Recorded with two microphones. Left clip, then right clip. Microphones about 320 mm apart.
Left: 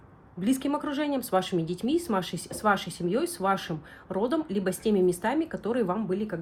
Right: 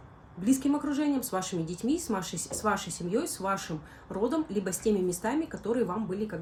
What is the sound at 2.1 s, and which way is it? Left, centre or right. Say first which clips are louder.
Speech: left 3 dB; centre.